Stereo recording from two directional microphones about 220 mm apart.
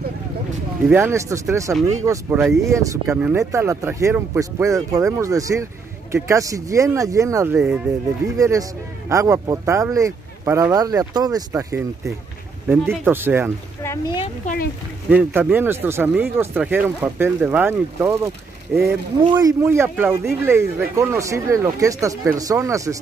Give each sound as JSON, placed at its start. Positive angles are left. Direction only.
{"t": 0.8, "sound": "speech", "side_deg": -10}
{"t": 7.5, "sound": "speech", "side_deg": -5}
{"t": 8.4, "sound": "speech", "side_deg": -15}
{"t": 13.8, "sound": "speech", "side_deg": 20}
{"t": 14.4, "sound": "speech", "side_deg": 40}
{"t": 15.0, "sound": "speech", "side_deg": -10}